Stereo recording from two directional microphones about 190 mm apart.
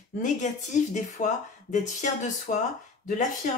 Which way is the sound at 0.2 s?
40° left (ahead or behind).